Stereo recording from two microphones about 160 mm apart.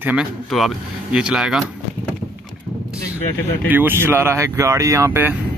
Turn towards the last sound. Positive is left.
turn(degrees=-15)  # may be behind; listen again after turning